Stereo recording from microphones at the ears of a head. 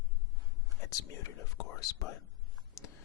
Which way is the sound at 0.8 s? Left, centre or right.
Left.